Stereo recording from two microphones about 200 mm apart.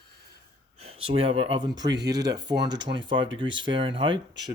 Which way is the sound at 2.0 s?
55° right (ahead or behind).